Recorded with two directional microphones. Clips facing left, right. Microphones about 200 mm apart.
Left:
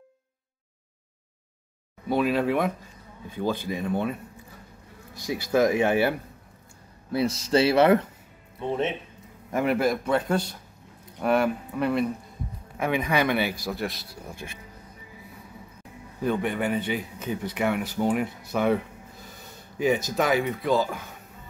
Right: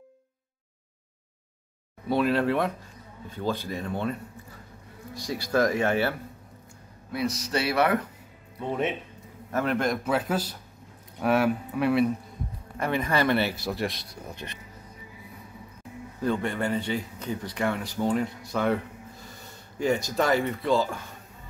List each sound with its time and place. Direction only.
2.0 s a man's voice: 10° left (ahead or behind)
5.3 s a man's voice: 15° left (ahead or behind)
7.1 s speech: 30° left (ahead or behind)
9.5 s a man's voice: 10° left (ahead or behind)
13.1 s a man's voice: 15° left (ahead or behind)
13.7 s a man's voice: centre (ahead or behind)
16.2 s a man's voice: 15° left (ahead or behind)
19.3 s a sound: 15° left (ahead or behind)
20.6 s a man's voice: 15° left (ahead or behind)